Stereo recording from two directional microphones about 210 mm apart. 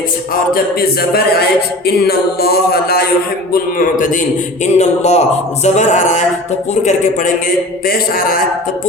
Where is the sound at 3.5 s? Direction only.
40° left (ahead or behind).